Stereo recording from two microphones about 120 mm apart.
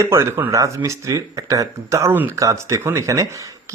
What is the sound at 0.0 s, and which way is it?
Speech, 25° right (ahead or behind).